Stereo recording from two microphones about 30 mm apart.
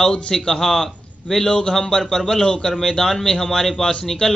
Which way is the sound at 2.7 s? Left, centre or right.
Centre.